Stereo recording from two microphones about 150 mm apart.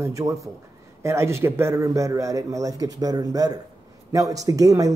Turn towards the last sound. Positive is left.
turn(degrees=-25)  # may be behind; listen again after turning